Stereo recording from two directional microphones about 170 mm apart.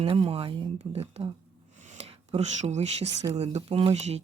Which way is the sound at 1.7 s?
45° right (ahead or behind).